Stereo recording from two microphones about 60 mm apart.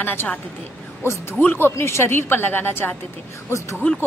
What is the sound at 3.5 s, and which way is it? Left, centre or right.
Speech, left.